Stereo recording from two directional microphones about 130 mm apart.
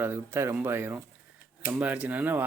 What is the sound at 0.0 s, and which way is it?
Speech, 15° right (ahead or behind).